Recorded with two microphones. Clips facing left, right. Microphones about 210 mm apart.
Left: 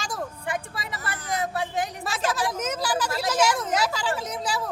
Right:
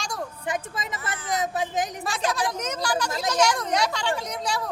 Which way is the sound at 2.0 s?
Centre (ahead or behind).